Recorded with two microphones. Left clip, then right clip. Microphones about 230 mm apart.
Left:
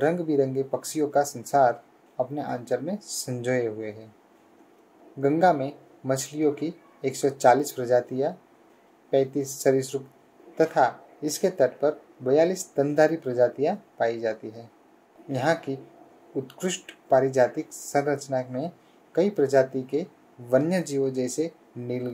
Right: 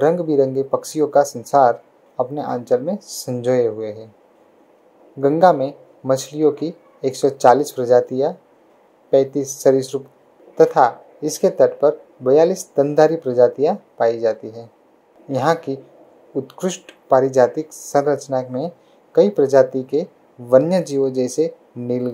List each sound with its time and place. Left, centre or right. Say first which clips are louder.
0.0 s speech: right 8 dB; right
5.2 s speech: right 8 dB; right